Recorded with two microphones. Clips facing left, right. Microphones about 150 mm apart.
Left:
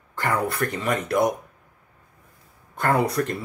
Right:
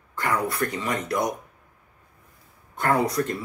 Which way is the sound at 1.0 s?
55° left (ahead or behind).